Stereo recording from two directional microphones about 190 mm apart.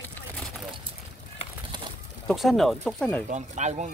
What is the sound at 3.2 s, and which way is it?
Speech, 40° right (ahead or behind).